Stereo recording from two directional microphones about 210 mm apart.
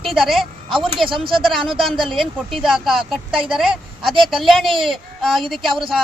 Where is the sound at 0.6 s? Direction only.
25° right (ahead or behind).